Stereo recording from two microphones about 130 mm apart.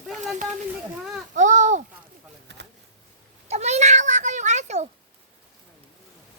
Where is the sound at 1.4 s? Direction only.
70° right (ahead or behind).